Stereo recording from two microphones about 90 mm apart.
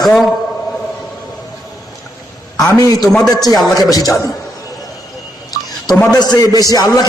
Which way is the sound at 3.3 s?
45° left (ahead or behind).